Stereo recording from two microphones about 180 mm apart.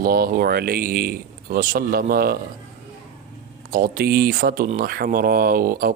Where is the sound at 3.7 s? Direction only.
55° right (ahead or behind).